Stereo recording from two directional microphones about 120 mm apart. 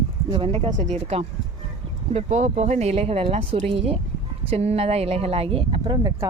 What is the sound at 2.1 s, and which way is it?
Speech, 70° right (ahead or behind).